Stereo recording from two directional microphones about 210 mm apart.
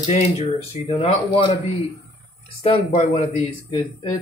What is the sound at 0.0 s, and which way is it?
Speech, 30° left (ahead or behind).